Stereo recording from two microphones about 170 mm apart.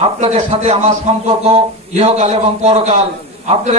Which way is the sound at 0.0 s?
40° right (ahead or behind).